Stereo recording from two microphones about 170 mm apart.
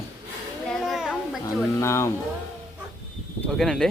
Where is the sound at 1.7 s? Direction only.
15° left (ahead or behind).